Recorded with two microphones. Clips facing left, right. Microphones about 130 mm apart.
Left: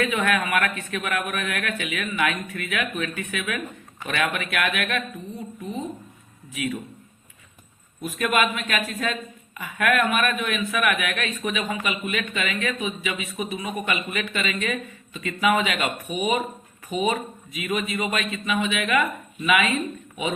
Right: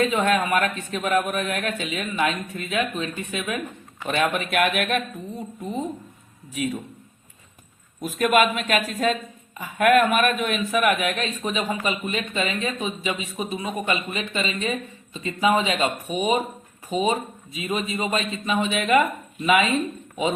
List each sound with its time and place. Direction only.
0.0 s a man's voice: 30° right (ahead or behind)
6.5 s a man's voice: 35° right (ahead or behind)
8.0 s a man's voice: 45° right (ahead or behind)